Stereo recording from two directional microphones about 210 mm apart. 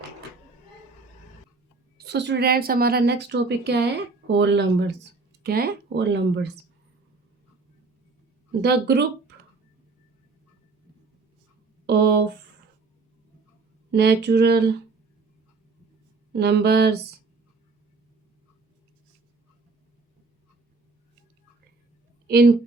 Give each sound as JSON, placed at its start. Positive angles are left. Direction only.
{"t": 2.0, "sound": "a woman's voice", "side_deg": -55}
{"t": 5.4, "sound": "speech", "side_deg": -45}
{"t": 8.6, "sound": "a woman's voice", "side_deg": -50}
{"t": 11.9, "sound": "a woman's voice", "side_deg": -50}
{"t": 13.9, "sound": "a woman's voice", "side_deg": -50}
{"t": 16.3, "sound": "a woman's voice", "side_deg": -50}
{"t": 22.3, "sound": "a woman's voice", "side_deg": -45}